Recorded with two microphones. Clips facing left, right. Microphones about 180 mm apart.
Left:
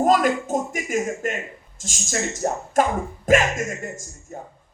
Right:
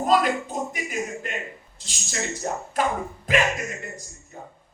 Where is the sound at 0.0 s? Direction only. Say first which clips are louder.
Left 3 dB; 45° left (ahead or behind).